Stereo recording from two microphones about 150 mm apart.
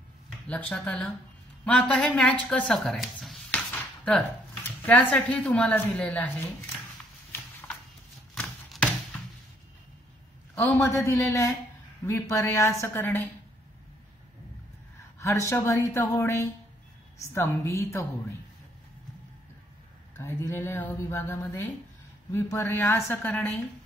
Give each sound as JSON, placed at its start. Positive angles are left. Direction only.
{"t": 0.5, "sound": "a woman's voice", "side_deg": 10}
{"t": 3.7, "sound": "a sound", "side_deg": 5}
{"t": 4.8, "sound": "a woman's voice", "side_deg": 10}
{"t": 8.4, "sound": "chopping", "side_deg": 5}
{"t": 10.5, "sound": "a man's voice", "side_deg": 15}
{"t": 15.1, "sound": "a woman's voice", "side_deg": 20}
{"t": 20.2, "sound": "a woman's voice", "side_deg": 15}